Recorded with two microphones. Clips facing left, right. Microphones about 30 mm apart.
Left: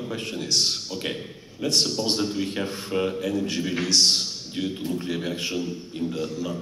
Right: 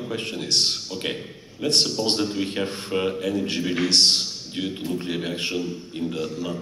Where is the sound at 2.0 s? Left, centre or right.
Centre.